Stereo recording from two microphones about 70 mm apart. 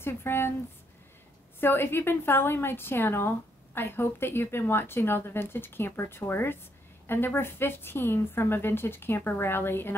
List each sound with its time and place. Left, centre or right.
0.0 s a woman's voice: left
1.6 s a woman's voice: left